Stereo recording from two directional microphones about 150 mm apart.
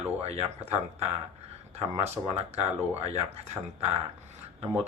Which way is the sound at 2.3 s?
45° right (ahead or behind).